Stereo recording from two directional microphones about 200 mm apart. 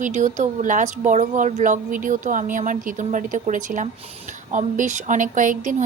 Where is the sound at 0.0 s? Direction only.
40° right (ahead or behind).